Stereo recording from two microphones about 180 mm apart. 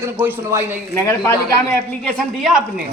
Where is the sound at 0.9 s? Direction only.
15° left (ahead or behind).